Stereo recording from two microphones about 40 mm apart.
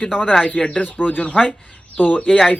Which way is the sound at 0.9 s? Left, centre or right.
Left.